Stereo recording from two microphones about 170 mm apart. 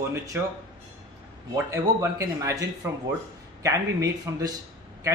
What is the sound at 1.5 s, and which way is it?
Speech, 20° right (ahead or behind).